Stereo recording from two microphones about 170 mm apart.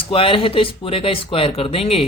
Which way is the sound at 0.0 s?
30° left (ahead or behind).